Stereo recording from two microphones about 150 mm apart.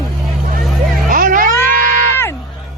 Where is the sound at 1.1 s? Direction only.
65° right (ahead or behind).